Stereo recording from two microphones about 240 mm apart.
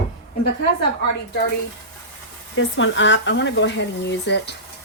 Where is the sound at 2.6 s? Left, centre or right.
Left.